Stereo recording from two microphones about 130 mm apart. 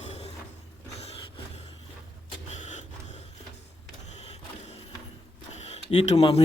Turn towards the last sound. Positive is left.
turn(degrees=55)  # may be behind; listen again after turning